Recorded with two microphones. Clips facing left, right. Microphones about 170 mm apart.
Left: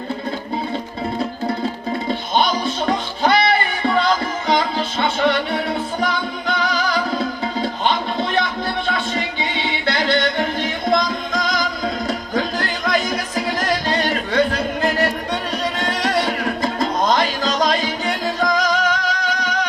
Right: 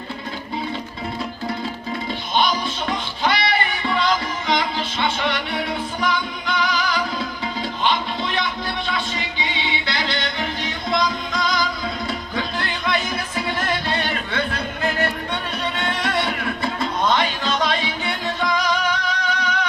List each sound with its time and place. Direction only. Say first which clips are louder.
1.5 s music: left 4 dB; 40° left (ahead or behind)
4.4 s music: left 4 dB; 40° left (ahead or behind)